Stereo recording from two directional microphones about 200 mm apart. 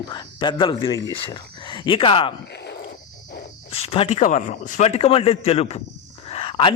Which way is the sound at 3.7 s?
30° left (ahead or behind).